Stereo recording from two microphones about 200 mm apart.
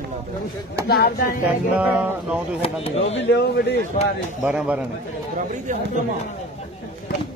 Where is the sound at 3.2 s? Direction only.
55° left (ahead or behind).